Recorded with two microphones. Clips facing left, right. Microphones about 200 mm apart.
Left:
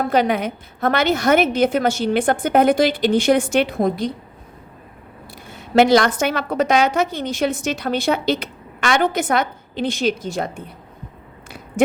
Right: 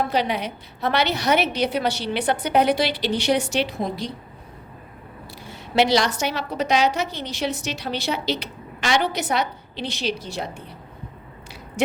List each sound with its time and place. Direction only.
0.0 s a woman's voice: 50° left (ahead or behind)
5.5 s a woman's voice: 50° left (ahead or behind)